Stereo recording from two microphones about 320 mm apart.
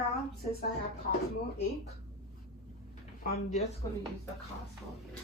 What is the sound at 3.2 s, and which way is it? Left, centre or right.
Speech, left.